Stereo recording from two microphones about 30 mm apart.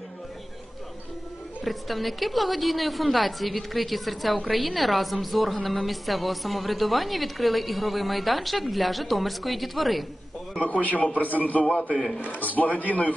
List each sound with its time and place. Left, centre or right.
1.6 s a woman's voice: centre
10.7 s a man's voice: left
11.7 s a man's voice: left
12.3 s a man's voice: left